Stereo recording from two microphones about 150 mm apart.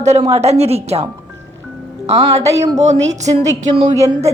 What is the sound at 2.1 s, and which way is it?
Speech, 40° right (ahead or behind).